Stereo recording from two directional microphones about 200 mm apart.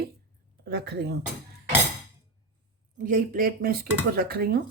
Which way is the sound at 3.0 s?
45° right (ahead or behind).